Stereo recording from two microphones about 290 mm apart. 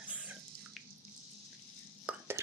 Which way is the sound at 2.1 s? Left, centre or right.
Centre.